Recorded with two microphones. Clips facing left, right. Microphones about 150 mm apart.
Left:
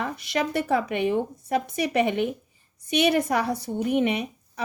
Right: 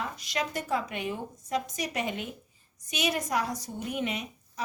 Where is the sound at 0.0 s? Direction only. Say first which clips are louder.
Left 6 dB; 60° left (ahead or behind).